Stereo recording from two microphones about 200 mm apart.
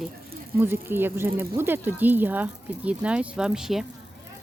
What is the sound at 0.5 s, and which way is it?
Speech, 10° right (ahead or behind).